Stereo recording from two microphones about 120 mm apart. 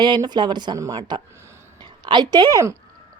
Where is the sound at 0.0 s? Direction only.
35° right (ahead or behind).